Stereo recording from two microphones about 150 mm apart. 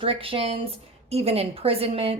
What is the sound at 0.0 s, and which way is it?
A woman's voice, 40° right (ahead or behind).